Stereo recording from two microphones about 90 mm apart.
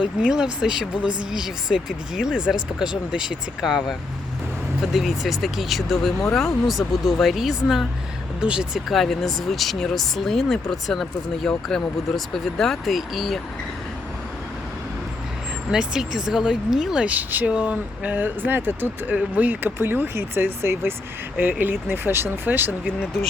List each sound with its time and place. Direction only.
0.0 s speech: 10° right (ahead or behind)
15.7 s speech: 5° right (ahead or behind); by 22.7 s 25° right (ahead or behind)